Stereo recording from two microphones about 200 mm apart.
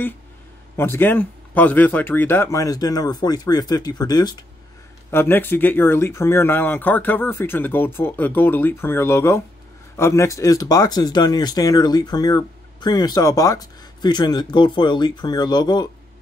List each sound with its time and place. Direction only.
0.7 s speech: 10° left (ahead or behind)
5.1 s speech: 10° left (ahead or behind)